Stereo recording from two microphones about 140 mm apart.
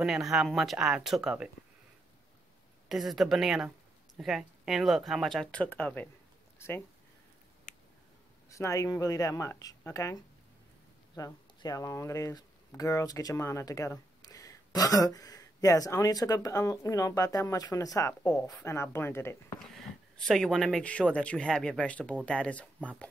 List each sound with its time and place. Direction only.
0.0 s speech: 5° right (ahead or behind)
2.9 s speech: centre (ahead or behind)
8.5 s speech: 20° left (ahead or behind)
18.2 s speech: 10° left (ahead or behind)
18.6 s speech: 20° left (ahead or behind)
19.6 s speech: 5° left (ahead or behind)